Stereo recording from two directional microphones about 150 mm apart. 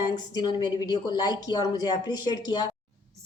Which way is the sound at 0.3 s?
30° left (ahead or behind).